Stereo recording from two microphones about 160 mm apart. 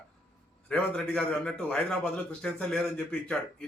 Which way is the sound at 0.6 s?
5° left (ahead or behind).